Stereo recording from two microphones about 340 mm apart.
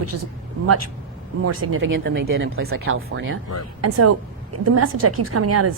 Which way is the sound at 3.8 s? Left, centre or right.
Right.